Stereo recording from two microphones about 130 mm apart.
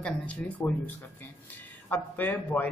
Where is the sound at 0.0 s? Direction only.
10° left (ahead or behind).